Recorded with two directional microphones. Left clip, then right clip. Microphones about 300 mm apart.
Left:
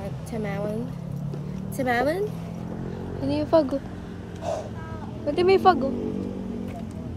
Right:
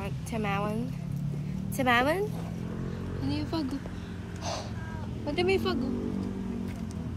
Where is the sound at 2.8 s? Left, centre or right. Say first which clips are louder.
Left 7 dB; centre.